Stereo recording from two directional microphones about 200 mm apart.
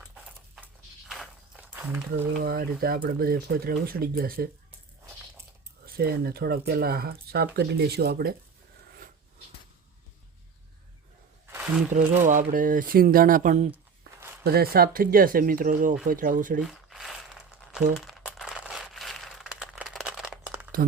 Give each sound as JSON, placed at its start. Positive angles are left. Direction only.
{"t": 1.0, "sound": "walk", "side_deg": 0}
{"t": 2.4, "sound": "speech", "side_deg": -50}
{"t": 5.8, "sound": "speech", "side_deg": -50}
{"t": 11.5, "sound": "a sound", "side_deg": -5}
{"t": 11.9, "sound": "speech", "side_deg": -40}
{"t": 14.4, "sound": "speech", "side_deg": -50}
{"t": 16.6, "sound": "crumpling", "side_deg": 0}